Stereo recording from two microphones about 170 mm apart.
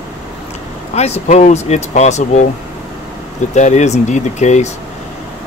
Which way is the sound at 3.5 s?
45° left (ahead or behind).